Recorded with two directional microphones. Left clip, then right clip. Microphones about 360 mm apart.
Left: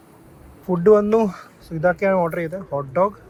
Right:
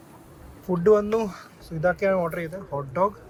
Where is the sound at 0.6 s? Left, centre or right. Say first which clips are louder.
Left 5 dB; centre.